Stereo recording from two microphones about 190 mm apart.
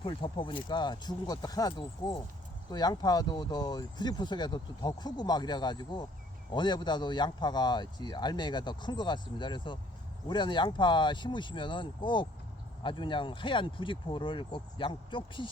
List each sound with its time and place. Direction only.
0.0 s speech: 25° left (ahead or behind)